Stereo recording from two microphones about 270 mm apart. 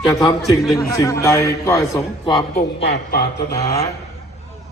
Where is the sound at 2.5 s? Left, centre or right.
Left.